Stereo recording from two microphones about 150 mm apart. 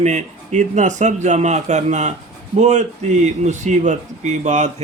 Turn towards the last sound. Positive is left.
turn(degrees=-50)  # may be behind; listen again after turning